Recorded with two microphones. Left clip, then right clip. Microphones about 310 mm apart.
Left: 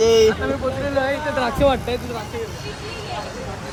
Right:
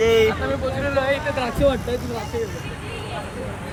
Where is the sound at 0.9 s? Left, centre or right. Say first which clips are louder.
Even; left.